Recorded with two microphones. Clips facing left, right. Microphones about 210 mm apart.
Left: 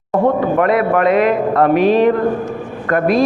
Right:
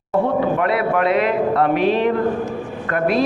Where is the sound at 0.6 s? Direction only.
50° left (ahead or behind).